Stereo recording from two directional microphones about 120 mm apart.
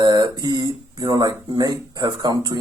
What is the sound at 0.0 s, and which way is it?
Speech, 35° right (ahead or behind).